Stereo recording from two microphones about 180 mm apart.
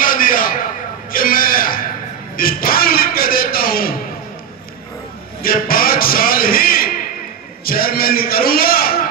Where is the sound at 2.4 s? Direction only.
55° left (ahead or behind).